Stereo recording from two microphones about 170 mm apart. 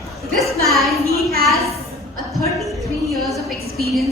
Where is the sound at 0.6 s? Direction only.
Centre (ahead or behind).